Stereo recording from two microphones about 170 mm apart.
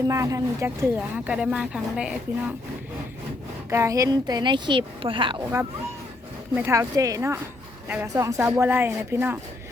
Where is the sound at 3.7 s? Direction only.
15° right (ahead or behind).